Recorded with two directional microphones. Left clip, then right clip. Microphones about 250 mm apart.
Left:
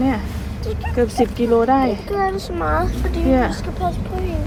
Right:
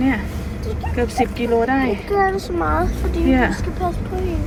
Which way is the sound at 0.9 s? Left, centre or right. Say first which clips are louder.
Left 2 dB; centre.